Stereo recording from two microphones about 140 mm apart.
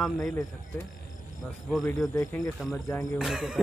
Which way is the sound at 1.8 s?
20° left (ahead or behind).